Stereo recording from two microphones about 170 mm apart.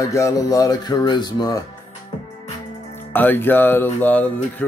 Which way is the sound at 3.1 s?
10° left (ahead or behind).